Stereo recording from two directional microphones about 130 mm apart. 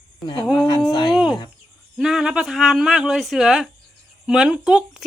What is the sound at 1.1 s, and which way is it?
Speech, 5° right (ahead or behind).